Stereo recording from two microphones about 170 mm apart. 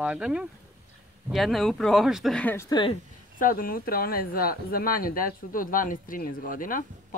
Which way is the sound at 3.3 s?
55° left (ahead or behind).